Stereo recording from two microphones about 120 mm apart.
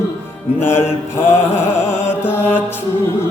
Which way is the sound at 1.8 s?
20° left (ahead or behind).